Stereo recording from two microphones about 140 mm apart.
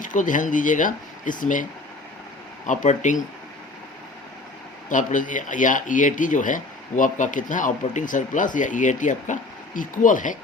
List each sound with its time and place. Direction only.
0.0 s speech: 70° left (ahead or behind)
2.6 s speech: 60° left (ahead or behind)
4.9 s speech: 70° left (ahead or behind)